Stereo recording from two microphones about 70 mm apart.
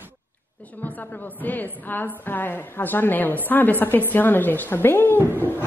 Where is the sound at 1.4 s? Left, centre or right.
Left.